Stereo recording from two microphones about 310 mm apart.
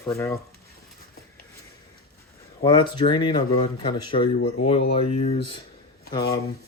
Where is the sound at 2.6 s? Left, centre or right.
Centre.